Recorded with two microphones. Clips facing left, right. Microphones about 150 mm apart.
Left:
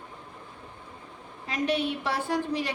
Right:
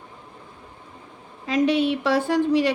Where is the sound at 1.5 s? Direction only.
90° right.